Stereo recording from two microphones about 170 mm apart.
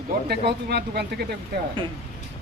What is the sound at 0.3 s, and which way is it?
Speech, 75° right (ahead or behind).